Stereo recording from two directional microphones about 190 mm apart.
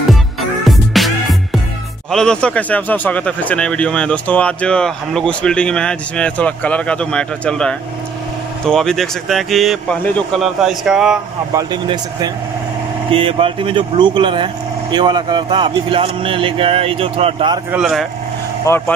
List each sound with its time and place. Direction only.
0.7 s music: centre (ahead or behind)
2.0 s speech: 5° left (ahead or behind)
11.5 s speech: 20° right (ahead or behind)
17.6 s speech: 5° right (ahead or behind)
18.7 s speech: 15° left (ahead or behind)